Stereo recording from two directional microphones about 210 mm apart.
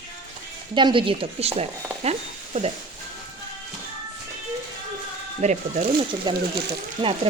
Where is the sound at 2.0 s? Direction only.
30° right (ahead or behind).